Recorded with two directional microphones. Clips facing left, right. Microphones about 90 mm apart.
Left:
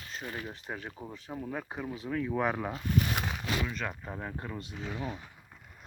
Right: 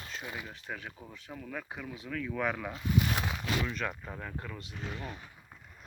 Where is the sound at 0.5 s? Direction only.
30° left (ahead or behind).